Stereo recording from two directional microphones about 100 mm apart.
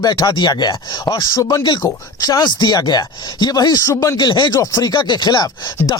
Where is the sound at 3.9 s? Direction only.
30° left (ahead or behind).